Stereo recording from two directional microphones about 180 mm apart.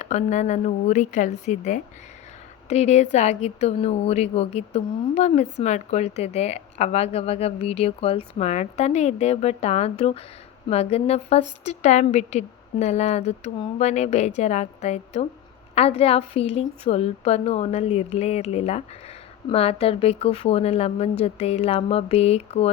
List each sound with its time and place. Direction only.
0.0 s speech: 40° left (ahead or behind)